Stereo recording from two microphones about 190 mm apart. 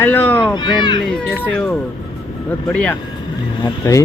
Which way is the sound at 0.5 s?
25° left (ahead or behind).